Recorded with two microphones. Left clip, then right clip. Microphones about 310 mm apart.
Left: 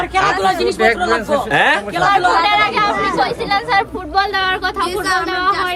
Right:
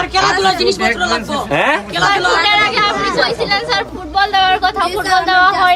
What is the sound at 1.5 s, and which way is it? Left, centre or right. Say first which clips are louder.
Speech: even; centre.